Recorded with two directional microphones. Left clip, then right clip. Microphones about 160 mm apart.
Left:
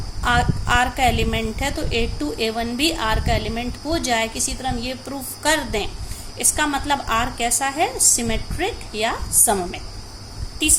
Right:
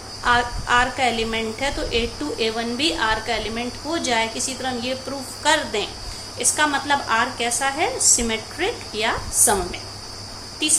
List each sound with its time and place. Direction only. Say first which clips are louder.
0.3 s a woman's voice: right 1 dB; 55° left (ahead or behind)